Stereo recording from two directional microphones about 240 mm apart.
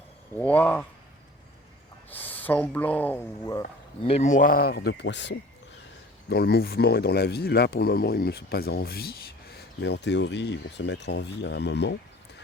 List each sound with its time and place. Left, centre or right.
0.3 s speech: centre
2.0 s speech: centre
4.0 s speech: left